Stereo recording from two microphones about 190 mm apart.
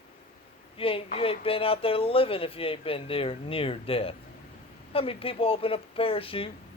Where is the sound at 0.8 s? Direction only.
30° left (ahead or behind).